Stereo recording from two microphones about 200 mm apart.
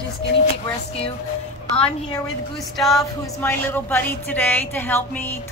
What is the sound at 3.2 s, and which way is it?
A woman's voice, 10° left (ahead or behind).